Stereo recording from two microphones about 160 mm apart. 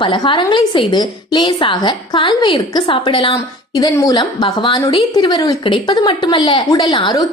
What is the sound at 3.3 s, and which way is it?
A woman's voice, 20° left (ahead or behind).